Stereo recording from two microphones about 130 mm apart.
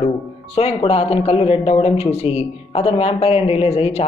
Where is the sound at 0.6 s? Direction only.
50° left (ahead or behind).